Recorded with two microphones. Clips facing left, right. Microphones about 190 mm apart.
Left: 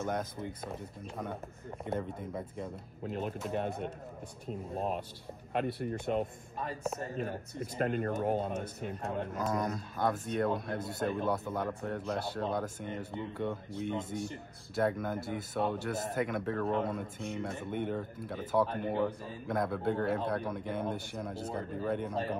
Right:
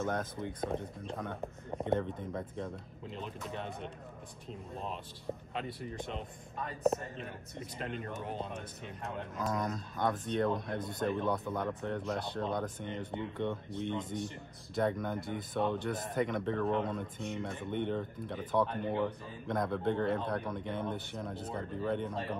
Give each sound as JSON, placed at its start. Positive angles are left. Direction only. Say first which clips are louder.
{"t": 0.2, "sound": "speech", "louder": "right 2 dB", "side_deg": 5}
{"t": 3.1, "sound": "speech", "louder": "left 7 dB", "side_deg": 50}
{"t": 4.5, "sound": "speech", "louder": "left 6 dB", "side_deg": 50}
{"t": 8.0, "sound": "speech", "louder": "left 8 dB", "side_deg": 45}
{"t": 9.3, "sound": "speech", "louder": "right 1 dB", "side_deg": 0}